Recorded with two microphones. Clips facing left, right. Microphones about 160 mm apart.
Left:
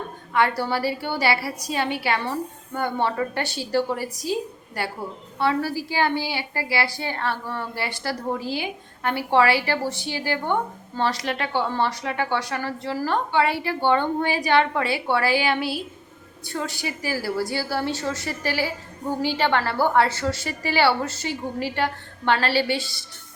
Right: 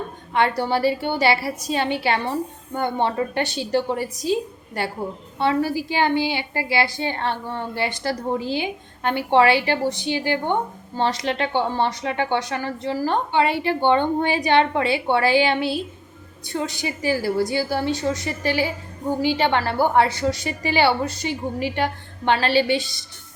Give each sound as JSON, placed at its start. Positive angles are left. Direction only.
{"t": 0.3, "sound": "a woman's voice", "side_deg": -20}